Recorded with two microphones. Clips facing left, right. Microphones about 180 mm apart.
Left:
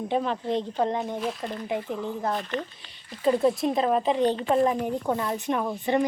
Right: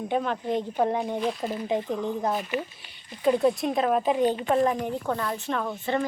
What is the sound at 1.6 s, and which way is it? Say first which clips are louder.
A woman's voice: right 2 dB; 20° right (ahead or behind).